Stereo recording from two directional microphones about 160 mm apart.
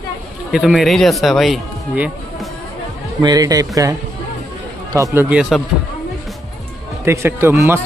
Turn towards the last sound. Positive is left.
turn(degrees=-15)  # may be behind; listen again after turning